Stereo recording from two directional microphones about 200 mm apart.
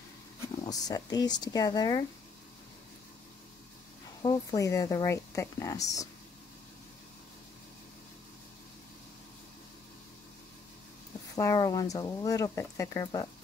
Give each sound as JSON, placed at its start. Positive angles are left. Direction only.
{"t": 0.7, "sound": "speech", "side_deg": 20}
{"t": 4.2, "sound": "speech", "side_deg": 15}
{"t": 11.3, "sound": "speech", "side_deg": 15}